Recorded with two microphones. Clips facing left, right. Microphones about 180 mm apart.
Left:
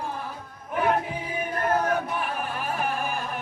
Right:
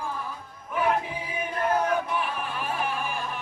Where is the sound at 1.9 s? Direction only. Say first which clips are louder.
Even; 45° left (ahead or behind).